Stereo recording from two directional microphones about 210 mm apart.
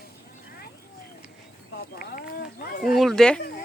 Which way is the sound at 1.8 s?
45° left (ahead or behind).